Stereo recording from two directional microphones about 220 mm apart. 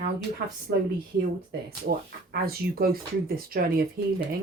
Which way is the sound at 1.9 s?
40° right (ahead or behind).